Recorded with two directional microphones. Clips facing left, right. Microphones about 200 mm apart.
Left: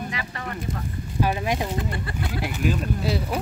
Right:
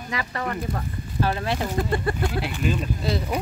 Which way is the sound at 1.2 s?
15° left (ahead or behind).